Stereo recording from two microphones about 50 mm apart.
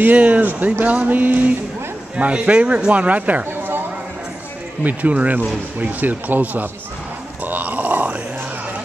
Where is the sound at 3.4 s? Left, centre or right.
Right.